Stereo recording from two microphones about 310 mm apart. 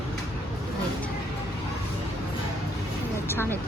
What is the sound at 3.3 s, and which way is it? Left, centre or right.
Speech, centre.